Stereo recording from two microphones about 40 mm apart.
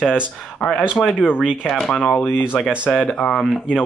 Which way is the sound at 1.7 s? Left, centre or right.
Centre.